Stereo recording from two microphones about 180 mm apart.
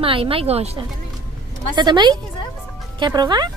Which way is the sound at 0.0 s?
30° right (ahead or behind).